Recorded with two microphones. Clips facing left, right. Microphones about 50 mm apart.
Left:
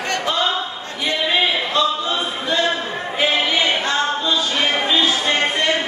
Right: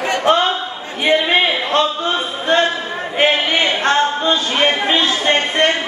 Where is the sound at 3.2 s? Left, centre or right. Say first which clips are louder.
Right 3 dB; right.